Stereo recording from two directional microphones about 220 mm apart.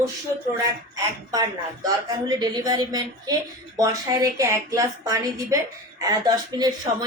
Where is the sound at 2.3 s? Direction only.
20° right (ahead or behind).